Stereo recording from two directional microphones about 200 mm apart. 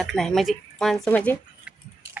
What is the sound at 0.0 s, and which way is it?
Speech, centre (ahead or behind).